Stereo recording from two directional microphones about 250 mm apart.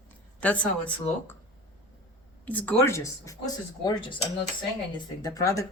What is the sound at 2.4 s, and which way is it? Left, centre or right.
A woman's voice, centre.